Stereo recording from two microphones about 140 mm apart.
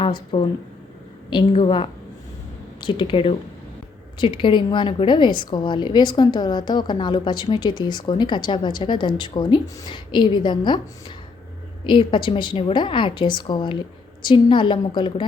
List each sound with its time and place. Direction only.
0.0 s a woman's voice: 35° left (ahead or behind)
11.9 s a woman's voice: 35° left (ahead or behind)